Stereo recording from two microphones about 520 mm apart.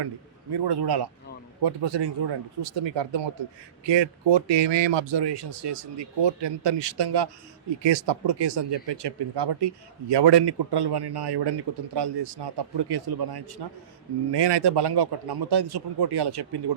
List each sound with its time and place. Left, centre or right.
0.5 s speech: right